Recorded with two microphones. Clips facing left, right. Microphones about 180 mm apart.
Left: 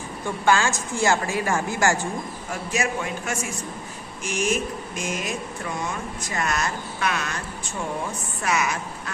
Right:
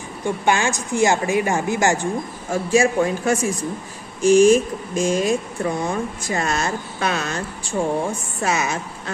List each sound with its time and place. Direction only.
0.2 s speech: 20° right (ahead or behind)
2.5 s a man's voice: 30° right (ahead or behind)